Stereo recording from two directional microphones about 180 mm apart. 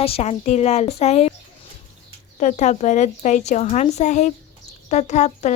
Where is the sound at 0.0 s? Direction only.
35° left (ahead or behind).